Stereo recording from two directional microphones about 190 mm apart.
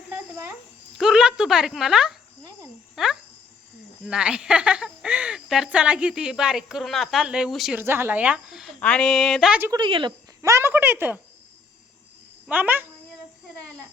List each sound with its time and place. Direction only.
0.9 s speech: centre (ahead or behind)
9.7 s speech: 25° right (ahead or behind); by 11.2 s 10° right (ahead or behind)
12.5 s speech: 10° right (ahead or behind)